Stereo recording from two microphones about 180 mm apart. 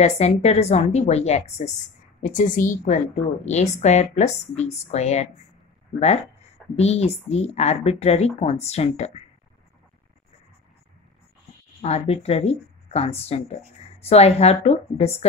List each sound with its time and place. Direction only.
0.0 s a woman's voice: 35° left (ahead or behind)
11.8 s speech: 35° left (ahead or behind)